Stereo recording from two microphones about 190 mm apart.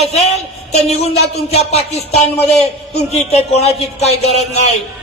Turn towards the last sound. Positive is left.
turn(degrees=35)  # may be behind; listen again after turning